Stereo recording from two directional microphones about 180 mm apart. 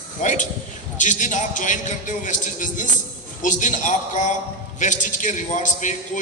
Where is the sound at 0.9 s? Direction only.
45° left (ahead or behind).